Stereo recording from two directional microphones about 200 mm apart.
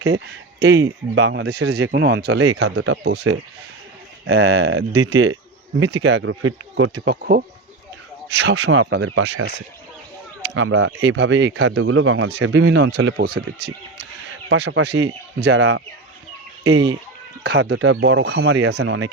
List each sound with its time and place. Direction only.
0.7 s speech: 65° right (ahead or behind)
4.4 s speech: 65° right (ahead or behind)
10.6 s speech: 90° right
12.4 s speech: 65° right (ahead or behind); by 13.4 s 50° right (ahead or behind)
14.5 s speech: 60° right (ahead or behind)
16.6 s speech: 80° right
17.4 s speech: 55° right (ahead or behind)